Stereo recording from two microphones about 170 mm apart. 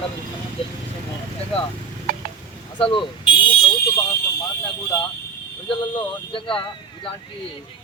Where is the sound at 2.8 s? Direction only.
30° left (ahead or behind).